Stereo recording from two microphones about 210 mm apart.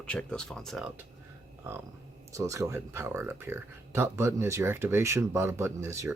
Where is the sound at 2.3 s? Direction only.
15° right (ahead or behind).